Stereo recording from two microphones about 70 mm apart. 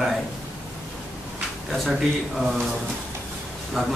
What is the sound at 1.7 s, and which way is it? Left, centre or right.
Speech, centre.